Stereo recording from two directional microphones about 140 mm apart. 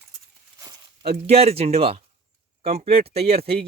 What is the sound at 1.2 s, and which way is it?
Speech, 45° right (ahead or behind).